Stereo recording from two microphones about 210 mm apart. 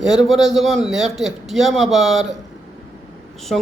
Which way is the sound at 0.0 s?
Centre (ahead or behind).